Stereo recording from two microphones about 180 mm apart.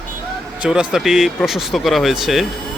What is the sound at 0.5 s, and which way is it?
Speech, 5° right (ahead or behind).